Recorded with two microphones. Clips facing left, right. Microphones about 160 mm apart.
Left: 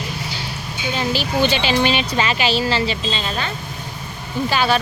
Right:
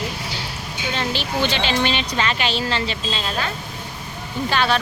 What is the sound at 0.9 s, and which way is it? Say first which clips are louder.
Speech: left 4 dB; 5° left (ahead or behind).